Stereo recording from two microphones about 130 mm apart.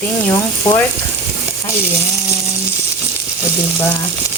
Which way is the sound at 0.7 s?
35° left (ahead or behind).